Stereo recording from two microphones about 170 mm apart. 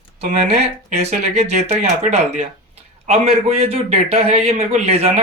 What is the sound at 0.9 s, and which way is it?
A man's voice, 40° right (ahead or behind).